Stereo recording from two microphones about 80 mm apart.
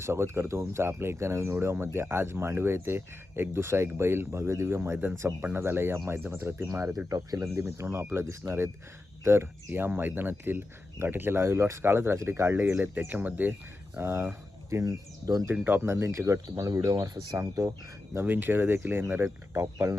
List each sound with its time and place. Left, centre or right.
0.0 s speech: right
6.7 s speech: right
7.4 s speech: right; by 14.0 s centre
14.0 s speech: right
14.7 s speech: right
15.6 s speech: right
17.4 s speech: right
18.2 s speech: right